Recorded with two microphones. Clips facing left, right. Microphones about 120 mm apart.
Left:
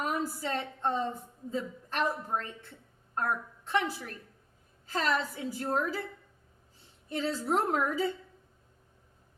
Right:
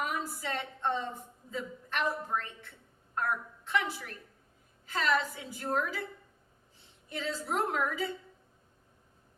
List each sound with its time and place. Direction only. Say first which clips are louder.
0.0 s a woman's voice: left 3 dB; 35° left (ahead or behind)
3.7 s a woman's voice: left 2 dB; 35° left (ahead or behind)
7.1 s a woman's voice: left 5 dB; 35° left (ahead or behind)